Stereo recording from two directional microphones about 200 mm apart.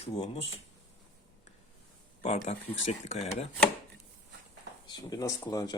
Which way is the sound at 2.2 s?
35° left (ahead or behind).